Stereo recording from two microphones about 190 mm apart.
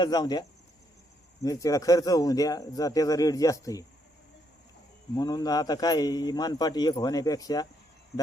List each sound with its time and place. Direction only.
0.0 s a man's voice: 20° left (ahead or behind)
5.1 s a man's voice: 20° left (ahead or behind)